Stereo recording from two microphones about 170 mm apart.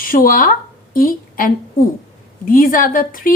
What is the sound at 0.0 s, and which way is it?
A woman's voice, 55° left (ahead or behind).